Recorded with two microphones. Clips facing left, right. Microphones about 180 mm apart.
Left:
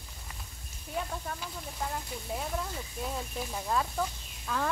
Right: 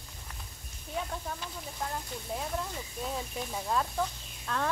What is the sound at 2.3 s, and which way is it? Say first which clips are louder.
Speech: even; centre (ahead or behind).